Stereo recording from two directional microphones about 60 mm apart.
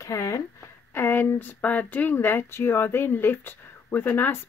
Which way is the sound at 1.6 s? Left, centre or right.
Left.